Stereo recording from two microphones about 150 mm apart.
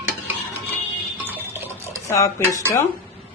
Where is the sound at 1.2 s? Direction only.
15° right (ahead or behind).